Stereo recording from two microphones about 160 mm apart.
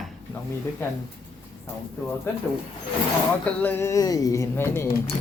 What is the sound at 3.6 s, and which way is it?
Speech, 15° left (ahead or behind).